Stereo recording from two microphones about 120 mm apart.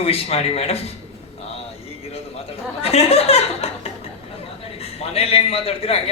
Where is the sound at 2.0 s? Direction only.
60° left (ahead or behind).